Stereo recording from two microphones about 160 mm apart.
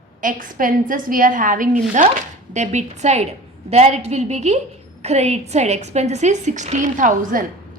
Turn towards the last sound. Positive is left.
turn(degrees=-55)  # may be behind; listen again after turning